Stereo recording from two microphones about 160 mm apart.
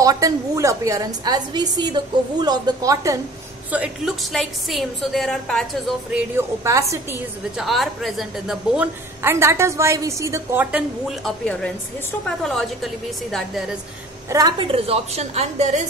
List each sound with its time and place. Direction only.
0.0 s a woman's voice: 20° right (ahead or behind)
3.7 s a woman's voice: 5° right (ahead or behind)
6.3 s a woman's voice: 20° right (ahead or behind)
7.5 s a woman's voice: centre (ahead or behind)
9.2 s a woman's voice: 15° right (ahead or behind); by 13.7 s centre (ahead or behind)
14.3 s a woman's voice: 25° right (ahead or behind)
14.7 s a woman's voice: 40° right (ahead or behind)